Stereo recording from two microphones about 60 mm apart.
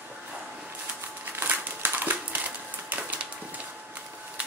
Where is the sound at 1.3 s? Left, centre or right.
Right.